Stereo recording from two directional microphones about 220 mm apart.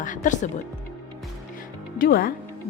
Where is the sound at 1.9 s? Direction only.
40° left (ahead or behind).